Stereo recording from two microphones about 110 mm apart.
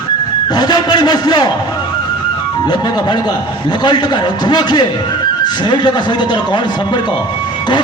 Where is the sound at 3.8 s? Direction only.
40° left (ahead or behind).